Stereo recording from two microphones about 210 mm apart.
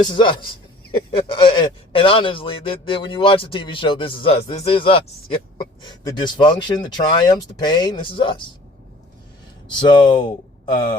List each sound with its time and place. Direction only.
0.0 s a man's voice: 25° left (ahead or behind)
9.9 s speech: 20° left (ahead or behind)